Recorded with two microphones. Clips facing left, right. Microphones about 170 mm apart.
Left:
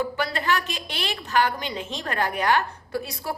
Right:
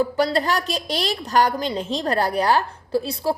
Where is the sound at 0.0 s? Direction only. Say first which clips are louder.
Right 7 dB; 35° right (ahead or behind).